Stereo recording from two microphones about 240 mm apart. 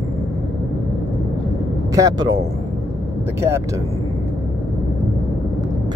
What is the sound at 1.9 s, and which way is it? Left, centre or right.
Speech, centre.